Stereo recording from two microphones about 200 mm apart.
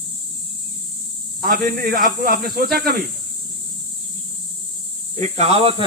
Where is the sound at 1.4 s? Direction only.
45° right (ahead or behind).